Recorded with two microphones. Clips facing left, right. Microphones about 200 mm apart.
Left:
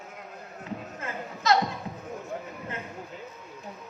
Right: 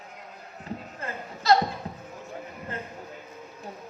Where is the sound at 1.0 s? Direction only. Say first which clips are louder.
Left 1 dB; 35° right (ahead or behind).